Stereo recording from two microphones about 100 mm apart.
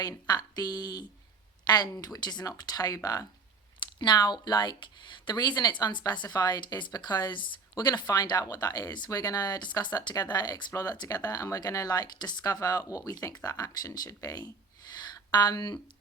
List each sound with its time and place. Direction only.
0.0 s speech: 40° left (ahead or behind)